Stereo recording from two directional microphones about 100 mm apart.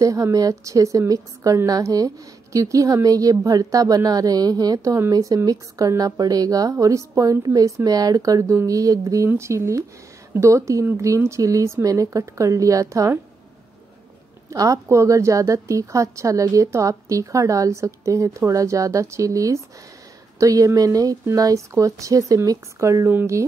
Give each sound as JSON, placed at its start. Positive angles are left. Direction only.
{"t": 0.0, "sound": "a woman's voice", "side_deg": -35}
{"t": 14.5, "sound": "a woman's voice", "side_deg": -35}